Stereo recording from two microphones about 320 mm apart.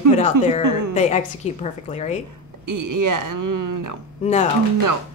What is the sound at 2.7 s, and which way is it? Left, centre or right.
A woman's voice, right.